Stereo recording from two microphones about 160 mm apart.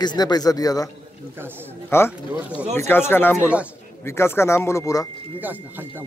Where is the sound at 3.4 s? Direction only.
10° right (ahead or behind).